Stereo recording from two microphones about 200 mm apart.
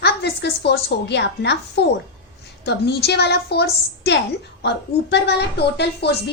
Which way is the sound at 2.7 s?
55° left (ahead or behind).